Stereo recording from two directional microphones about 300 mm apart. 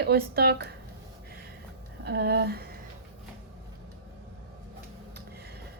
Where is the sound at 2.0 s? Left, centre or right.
Right.